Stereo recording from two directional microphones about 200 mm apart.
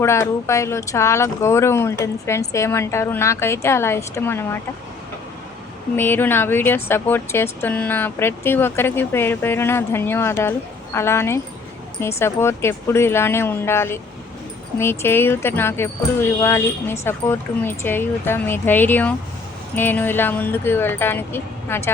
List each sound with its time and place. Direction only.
0.0 s speech: 15° left (ahead or behind)
6.0 s speech: 10° left (ahead or behind)